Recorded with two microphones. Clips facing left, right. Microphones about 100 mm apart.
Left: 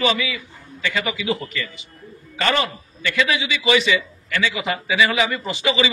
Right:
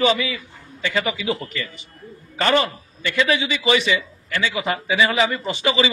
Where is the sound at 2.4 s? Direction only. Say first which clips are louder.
Right 2 dB; 30° right (ahead or behind).